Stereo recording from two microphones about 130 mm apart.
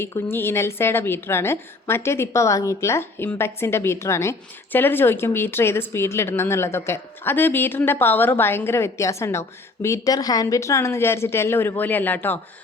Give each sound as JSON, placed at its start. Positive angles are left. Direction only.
{"t": 0.0, "sound": "a woman's voice", "side_deg": 20}